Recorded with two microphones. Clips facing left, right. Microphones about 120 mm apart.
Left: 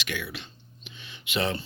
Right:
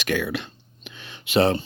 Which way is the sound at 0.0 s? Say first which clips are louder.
Right 10 dB; 45° right (ahead or behind).